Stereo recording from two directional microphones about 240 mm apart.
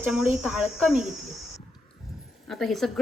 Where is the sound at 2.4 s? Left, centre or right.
Centre.